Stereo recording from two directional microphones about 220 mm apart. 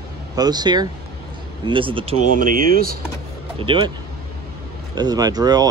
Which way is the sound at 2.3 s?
40° right (ahead or behind).